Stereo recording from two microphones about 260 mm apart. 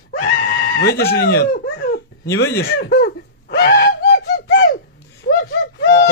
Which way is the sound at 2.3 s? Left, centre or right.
Left.